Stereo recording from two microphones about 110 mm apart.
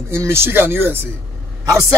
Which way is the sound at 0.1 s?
25° right (ahead or behind).